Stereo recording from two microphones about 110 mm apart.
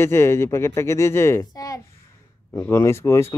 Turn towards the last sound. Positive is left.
turn(degrees=25)  # may be behind; listen again after turning